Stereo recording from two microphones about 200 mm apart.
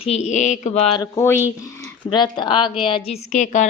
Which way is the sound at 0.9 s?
15° left (ahead or behind).